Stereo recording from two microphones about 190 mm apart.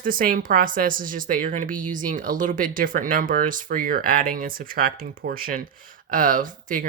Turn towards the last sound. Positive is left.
turn(degrees=-45)  # may be behind; listen again after turning